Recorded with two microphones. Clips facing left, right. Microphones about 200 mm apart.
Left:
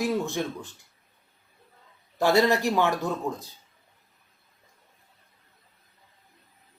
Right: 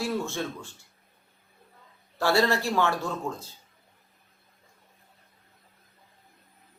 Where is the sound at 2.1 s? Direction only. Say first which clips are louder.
Left 3 dB; 20° left (ahead or behind).